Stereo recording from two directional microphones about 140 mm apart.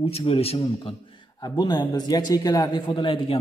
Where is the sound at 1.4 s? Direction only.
30° left (ahead or behind).